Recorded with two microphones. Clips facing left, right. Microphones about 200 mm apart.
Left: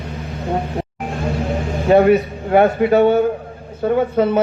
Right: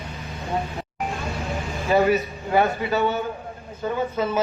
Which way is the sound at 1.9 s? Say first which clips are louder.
Left 7 dB; 60° left (ahead or behind).